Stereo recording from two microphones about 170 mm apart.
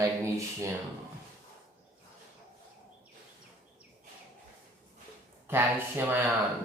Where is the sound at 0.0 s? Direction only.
15° right (ahead or behind).